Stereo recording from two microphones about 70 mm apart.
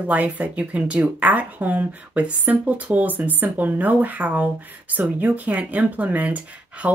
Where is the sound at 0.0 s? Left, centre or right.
Right.